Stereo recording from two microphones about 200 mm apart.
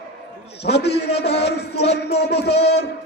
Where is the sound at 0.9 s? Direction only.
30° left (ahead or behind).